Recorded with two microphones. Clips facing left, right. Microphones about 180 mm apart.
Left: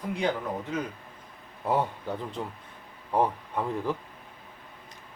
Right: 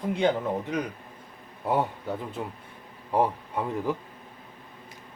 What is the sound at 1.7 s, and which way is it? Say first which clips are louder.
Speech: right 1 dB; 5° right (ahead or behind).